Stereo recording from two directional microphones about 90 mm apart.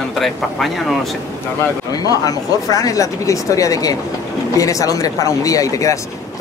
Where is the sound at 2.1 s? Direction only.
40° left (ahead or behind).